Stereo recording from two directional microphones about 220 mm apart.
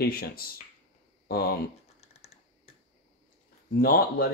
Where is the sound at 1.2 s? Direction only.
45° left (ahead or behind).